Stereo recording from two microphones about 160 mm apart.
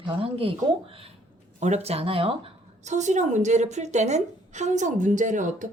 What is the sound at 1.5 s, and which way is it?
A woman's voice, 45° right (ahead or behind).